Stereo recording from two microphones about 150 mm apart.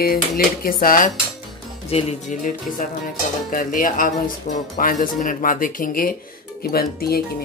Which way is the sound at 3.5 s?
65° left (ahead or behind).